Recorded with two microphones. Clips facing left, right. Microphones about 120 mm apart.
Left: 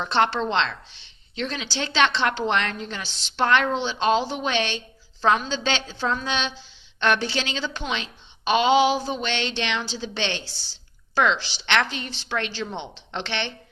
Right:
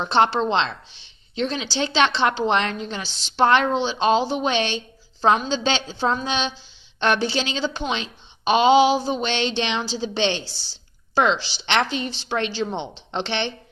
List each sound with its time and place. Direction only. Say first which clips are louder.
0.0 s a woman's voice: right 3 dB; 25° right (ahead or behind)